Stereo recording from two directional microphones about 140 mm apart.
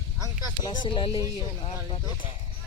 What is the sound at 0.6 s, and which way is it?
Speech, 35° left (ahead or behind).